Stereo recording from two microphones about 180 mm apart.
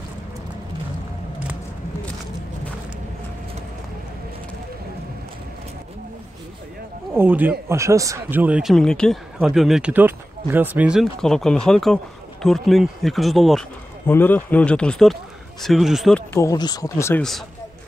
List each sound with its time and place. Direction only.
7.2 s speech: 10° right (ahead or behind)
14.0 s speech: 10° left (ahead or behind)
16.3 s speech: 20° left (ahead or behind)